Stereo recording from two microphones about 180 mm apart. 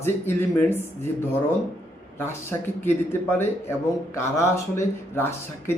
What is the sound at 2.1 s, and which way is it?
Speech, 15° left (ahead or behind).